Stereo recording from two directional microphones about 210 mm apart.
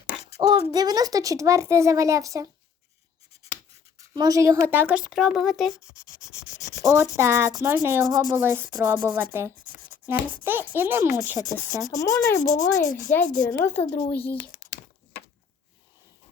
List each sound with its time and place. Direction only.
0.3 s speech: 20° right (ahead or behind)
4.1 s speech: 20° right (ahead or behind); by 5.8 s centre (ahead or behind)
5.8 s writing: 15° left (ahead or behind)
6.8 s speech: 10° right (ahead or behind)
10.4 s speech: 10° right (ahead or behind)
11.4 s speech: 15° left (ahead or behind)
12.4 s speech: 35° left (ahead or behind)
13.5 s speech: 10° left (ahead or behind)
14.6 s a sound: 15° left (ahead or behind)